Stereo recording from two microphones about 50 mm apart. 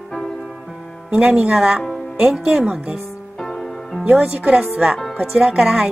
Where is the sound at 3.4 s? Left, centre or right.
Centre.